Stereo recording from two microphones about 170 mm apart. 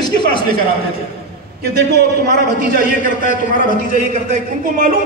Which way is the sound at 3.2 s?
50° left (ahead or behind).